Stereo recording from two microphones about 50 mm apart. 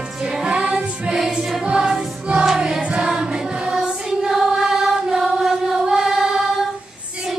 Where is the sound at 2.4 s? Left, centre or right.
Centre.